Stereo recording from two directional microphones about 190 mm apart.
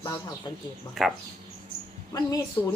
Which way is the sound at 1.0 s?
Centre (ahead or behind).